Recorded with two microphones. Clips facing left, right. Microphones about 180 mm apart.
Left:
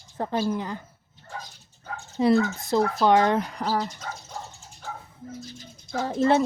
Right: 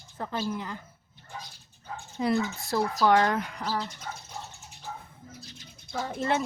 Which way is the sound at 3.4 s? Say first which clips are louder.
Left 5 dB; 40° left (ahead or behind).